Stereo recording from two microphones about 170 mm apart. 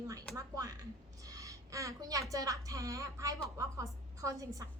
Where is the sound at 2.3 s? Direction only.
20° right (ahead or behind).